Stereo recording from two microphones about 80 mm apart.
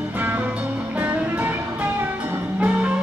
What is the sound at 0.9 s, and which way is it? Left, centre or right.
Music, centre.